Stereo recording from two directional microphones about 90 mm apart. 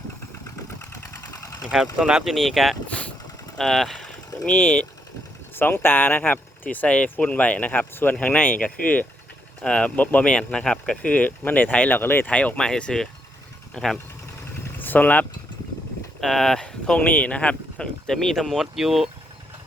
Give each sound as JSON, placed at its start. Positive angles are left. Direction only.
{"t": 1.2, "sound": "engine", "side_deg": 40}
{"t": 2.0, "sound": "speech", "side_deg": -5}
{"t": 4.4, "sound": "speech", "side_deg": 15}
{"t": 14.8, "sound": "speech", "side_deg": 20}
{"t": 16.2, "sound": "speech", "side_deg": 5}